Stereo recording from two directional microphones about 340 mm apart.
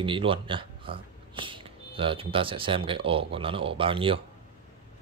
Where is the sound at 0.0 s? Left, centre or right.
Centre.